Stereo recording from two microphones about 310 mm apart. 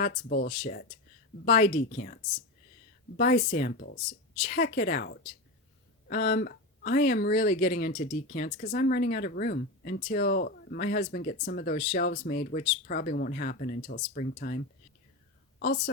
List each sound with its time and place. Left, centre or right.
0.0 s speech: left
3.2 s a woman's voice: left